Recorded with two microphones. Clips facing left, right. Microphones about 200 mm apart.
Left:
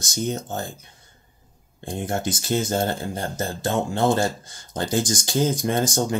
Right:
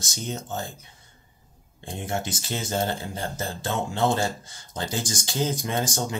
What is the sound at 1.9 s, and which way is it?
Speech, 45° left (ahead or behind).